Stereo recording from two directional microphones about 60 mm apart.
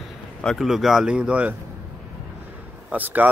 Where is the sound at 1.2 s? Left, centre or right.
Right.